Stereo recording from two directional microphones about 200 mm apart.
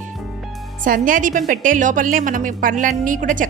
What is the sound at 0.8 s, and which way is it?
A woman's voice, 45° right (ahead or behind).